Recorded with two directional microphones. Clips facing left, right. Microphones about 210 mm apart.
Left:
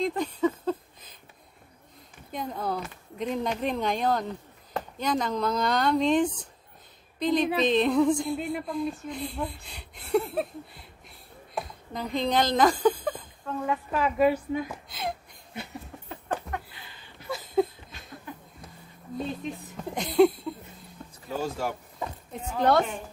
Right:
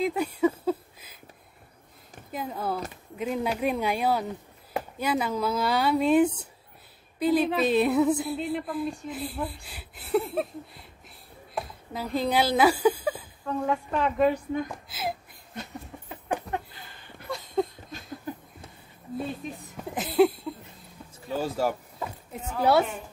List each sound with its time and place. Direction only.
0.0 s a sound: 10° right (ahead or behind)
2.3 s a woman's voice: 5° right (ahead or behind)
17.3 s a sound: centre (ahead or behind)
19.9 s speech: 5° right (ahead or behind)
21.6 s speech: 40° right (ahead or behind)
22.3 s speech: 5° right (ahead or behind)